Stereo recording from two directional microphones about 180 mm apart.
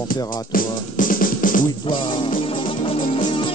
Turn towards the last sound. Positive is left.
turn(degrees=30)  # may be behind; listen again after turning